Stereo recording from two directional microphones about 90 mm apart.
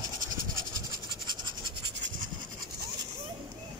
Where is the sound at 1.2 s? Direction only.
55° right (ahead or behind).